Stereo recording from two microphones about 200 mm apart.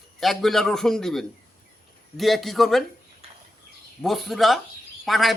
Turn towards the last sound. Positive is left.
turn(degrees=0)  # may be behind; listen again after turning